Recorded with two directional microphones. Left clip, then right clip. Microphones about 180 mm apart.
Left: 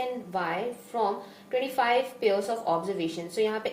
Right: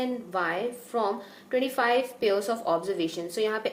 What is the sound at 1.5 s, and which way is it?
Speech, 40° right (ahead or behind).